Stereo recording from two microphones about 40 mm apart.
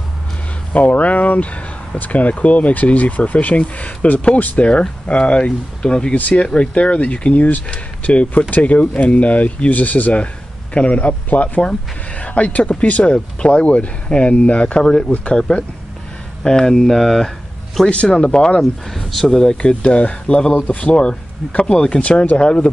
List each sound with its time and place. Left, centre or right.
0.7 s speech: left
11.0 s speech: left
13.0 s speech: left
16.4 s speech: centre
17.8 s speech: left
18.6 s speech: centre
19.2 s speech: centre
19.6 s speech: left
20.5 s speech: left